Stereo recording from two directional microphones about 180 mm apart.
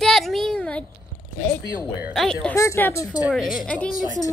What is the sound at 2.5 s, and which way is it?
Speech, 15° left (ahead or behind).